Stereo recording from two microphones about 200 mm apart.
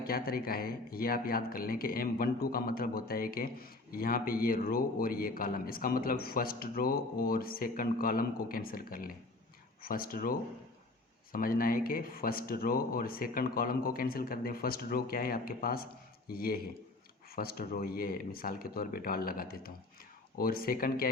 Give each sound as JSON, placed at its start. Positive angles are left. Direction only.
{"t": 0.0, "sound": "speech", "side_deg": 50}